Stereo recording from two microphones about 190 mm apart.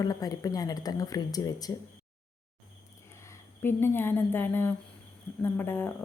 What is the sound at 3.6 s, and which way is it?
Speech, 10° left (ahead or behind).